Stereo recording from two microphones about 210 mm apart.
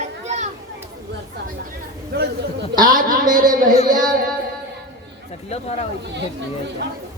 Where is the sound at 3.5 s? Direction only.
40° right (ahead or behind).